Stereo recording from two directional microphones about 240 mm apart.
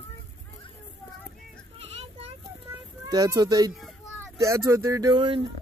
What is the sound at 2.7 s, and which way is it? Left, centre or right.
A child's voice, centre.